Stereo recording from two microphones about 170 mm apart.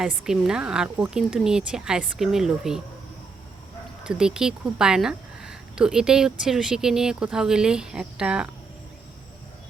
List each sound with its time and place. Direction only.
0.0 s speech: 5° right (ahead or behind)
4.0 s speech: 5° right (ahead or behind)